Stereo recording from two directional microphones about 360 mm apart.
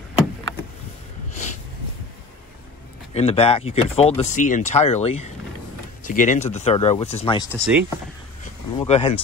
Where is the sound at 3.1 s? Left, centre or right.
Centre.